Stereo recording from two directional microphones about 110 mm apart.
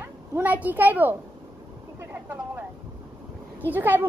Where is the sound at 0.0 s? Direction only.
15° right (ahead or behind).